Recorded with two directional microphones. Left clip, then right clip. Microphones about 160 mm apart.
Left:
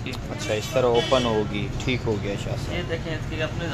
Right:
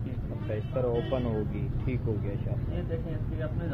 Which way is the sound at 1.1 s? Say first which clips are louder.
Left 10 dB; 35° left (ahead or behind).